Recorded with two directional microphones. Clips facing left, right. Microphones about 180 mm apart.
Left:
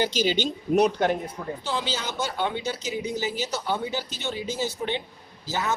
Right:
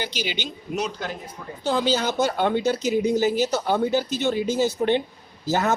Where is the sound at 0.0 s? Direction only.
45° left (ahead or behind); by 1.1 s 60° left (ahead or behind).